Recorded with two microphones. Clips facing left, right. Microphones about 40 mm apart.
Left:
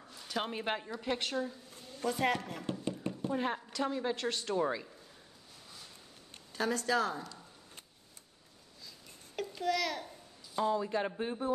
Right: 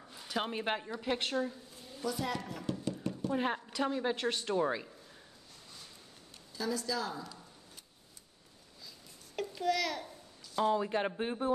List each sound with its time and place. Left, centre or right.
0.1 s a sound: centre
0.4 s speech: centre
2.0 s speech: left
3.3 s a woman's voice: centre
6.5 s speech: left
8.8 s babbling: centre
10.6 s speech: right